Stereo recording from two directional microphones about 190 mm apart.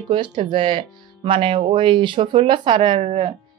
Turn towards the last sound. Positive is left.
turn(degrees=-30)  # may be behind; listen again after turning